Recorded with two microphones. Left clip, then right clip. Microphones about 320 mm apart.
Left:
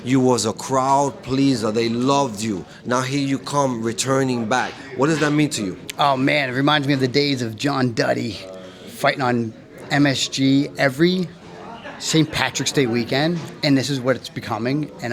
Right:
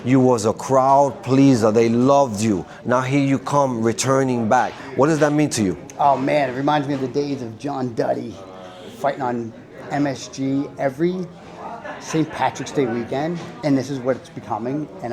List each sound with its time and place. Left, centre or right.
0.0 s speech: centre
4.9 s speech: right
6.0 s speech: left
7.1 s speech: left
7.6 s a man's voice: left